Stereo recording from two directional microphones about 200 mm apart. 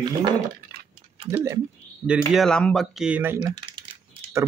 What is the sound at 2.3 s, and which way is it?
Speech, centre (ahead or behind).